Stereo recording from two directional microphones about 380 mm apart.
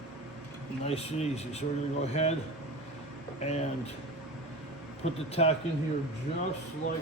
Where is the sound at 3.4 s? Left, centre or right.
Centre.